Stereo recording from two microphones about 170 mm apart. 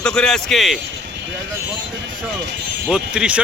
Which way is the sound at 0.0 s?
5° left (ahead or behind).